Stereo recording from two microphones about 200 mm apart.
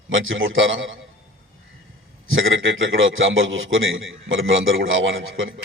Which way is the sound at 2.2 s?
75° right (ahead or behind).